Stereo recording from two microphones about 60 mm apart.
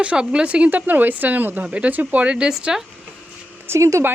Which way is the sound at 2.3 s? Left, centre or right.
Centre.